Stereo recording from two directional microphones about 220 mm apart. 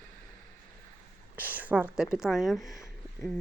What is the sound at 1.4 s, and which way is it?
Speech, 10° right (ahead or behind).